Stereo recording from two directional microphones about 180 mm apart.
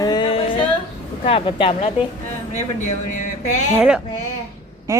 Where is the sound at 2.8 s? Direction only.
45° left (ahead or behind).